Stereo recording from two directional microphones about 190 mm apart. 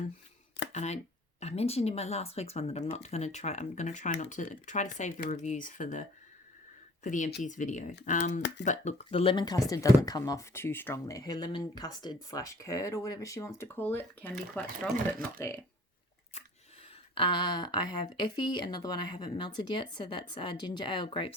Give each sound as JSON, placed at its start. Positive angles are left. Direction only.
{"t": 0.7, "sound": "speech", "side_deg": 35}
{"t": 8.4, "sound": "speech", "side_deg": 65}
{"t": 8.6, "sound": "speech", "side_deg": 40}
{"t": 17.2, "sound": "speech", "side_deg": 25}